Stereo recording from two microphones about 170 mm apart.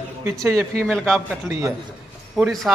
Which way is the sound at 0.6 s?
Centre (ahead or behind).